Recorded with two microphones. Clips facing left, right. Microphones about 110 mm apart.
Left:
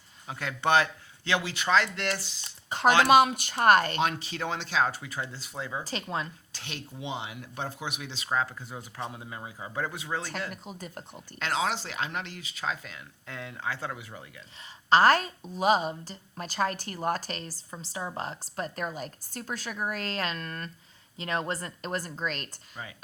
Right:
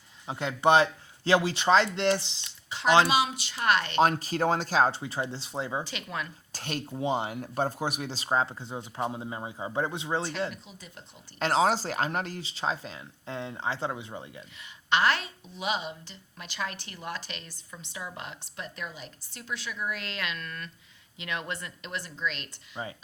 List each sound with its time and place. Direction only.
0.3 s speech: 25° right (ahead or behind)
2.4 s speech: 45° left (ahead or behind)
3.9 s speech: 40° right (ahead or behind)
5.8 s a woman's voice: 35° left (ahead or behind)
6.5 s speech: 45° right (ahead or behind); by 10.3 s 25° right (ahead or behind)
10.5 s speech: 50° left (ahead or behind)
11.3 s speech: 35° right (ahead or behind)
14.8 s a woman's voice: 40° left (ahead or behind)